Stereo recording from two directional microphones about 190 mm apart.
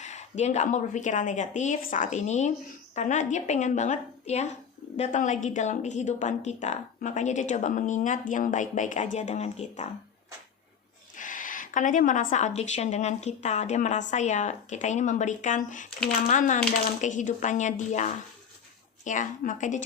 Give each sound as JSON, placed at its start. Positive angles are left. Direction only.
{"t": 0.0, "sound": "a woman's voice", "side_deg": 40}
{"t": 11.1, "sound": "a woman's voice", "side_deg": 45}